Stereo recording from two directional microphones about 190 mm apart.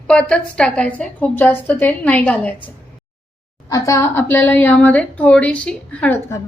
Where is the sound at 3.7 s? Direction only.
15° left (ahead or behind).